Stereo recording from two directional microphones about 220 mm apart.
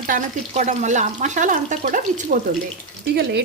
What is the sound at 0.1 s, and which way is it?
Speech, 35° right (ahead or behind).